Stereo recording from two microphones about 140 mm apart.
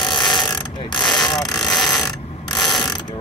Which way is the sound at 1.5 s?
Centre (ahead or behind).